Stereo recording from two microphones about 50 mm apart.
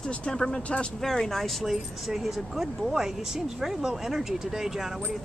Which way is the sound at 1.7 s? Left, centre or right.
Centre.